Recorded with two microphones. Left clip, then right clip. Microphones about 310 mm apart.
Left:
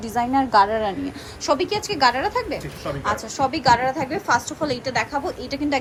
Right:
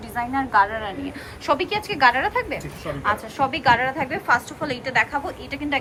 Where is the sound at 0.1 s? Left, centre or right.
Centre.